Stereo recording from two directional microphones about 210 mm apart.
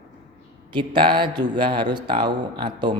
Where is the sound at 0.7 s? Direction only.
20° right (ahead or behind).